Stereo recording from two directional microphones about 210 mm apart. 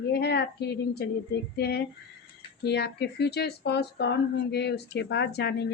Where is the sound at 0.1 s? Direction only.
50° left (ahead or behind).